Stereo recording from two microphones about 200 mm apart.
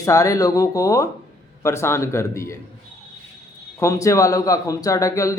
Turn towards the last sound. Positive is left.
turn(degrees=15)  # may be behind; listen again after turning